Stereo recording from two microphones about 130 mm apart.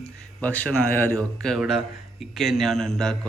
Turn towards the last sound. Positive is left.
turn(degrees=5)  # may be behind; listen again after turning